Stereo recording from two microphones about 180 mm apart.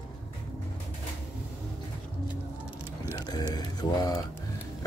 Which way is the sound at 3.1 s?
25° left (ahead or behind).